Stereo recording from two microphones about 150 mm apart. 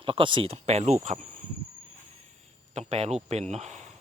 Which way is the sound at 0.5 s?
45° right (ahead or behind).